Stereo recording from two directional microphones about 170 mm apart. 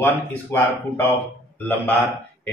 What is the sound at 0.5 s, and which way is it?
Speech, 15° left (ahead or behind).